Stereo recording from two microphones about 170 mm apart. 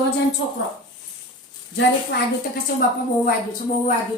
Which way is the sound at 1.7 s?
80° left.